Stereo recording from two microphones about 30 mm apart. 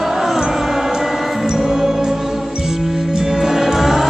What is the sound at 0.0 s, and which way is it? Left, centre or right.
Music, centre.